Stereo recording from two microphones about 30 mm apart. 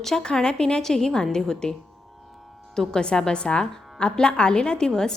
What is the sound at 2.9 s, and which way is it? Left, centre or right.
A woman's voice, left.